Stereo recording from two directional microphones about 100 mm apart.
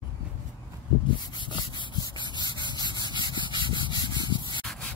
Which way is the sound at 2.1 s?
45° left (ahead or behind).